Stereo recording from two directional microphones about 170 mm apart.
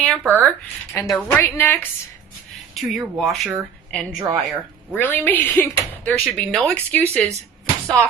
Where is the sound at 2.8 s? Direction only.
Centre (ahead or behind).